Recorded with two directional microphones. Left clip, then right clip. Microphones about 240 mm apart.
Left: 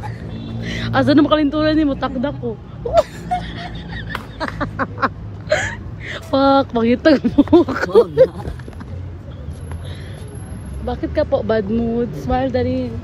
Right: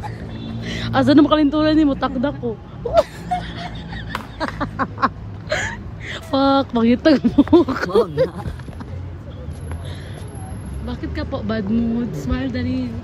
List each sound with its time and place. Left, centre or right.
0.6 s a man's voice: centre
3.3 s vehicle: centre
4.1 s a sound: right
4.6 s vehicle: centre
7.5 s speech: centre
10.9 s speech: centre